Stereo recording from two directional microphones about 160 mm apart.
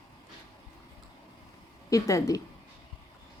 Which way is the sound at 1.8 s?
20° left (ahead or behind).